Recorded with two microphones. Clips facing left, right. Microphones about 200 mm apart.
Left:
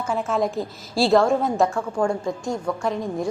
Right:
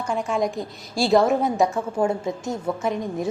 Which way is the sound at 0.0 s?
5° left (ahead or behind).